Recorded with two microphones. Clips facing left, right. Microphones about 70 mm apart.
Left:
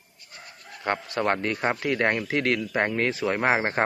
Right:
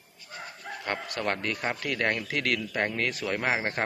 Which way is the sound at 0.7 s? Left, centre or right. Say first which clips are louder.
Right 8 dB; right.